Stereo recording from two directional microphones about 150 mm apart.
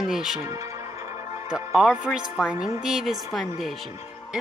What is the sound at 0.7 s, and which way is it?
Music, 50° left (ahead or behind).